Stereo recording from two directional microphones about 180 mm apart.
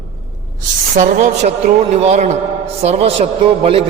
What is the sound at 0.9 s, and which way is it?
A man's voice, 40° right (ahead or behind).